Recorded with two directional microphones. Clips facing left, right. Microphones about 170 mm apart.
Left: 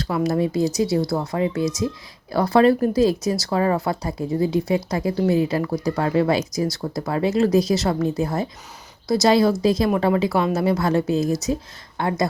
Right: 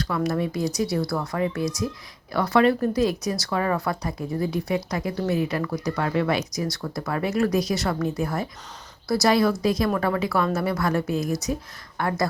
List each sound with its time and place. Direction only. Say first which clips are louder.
0.0 s speech: left 4 dB; 25° left (ahead or behind)